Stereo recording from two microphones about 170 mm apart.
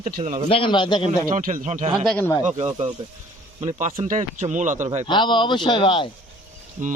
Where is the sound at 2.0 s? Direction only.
5° left (ahead or behind).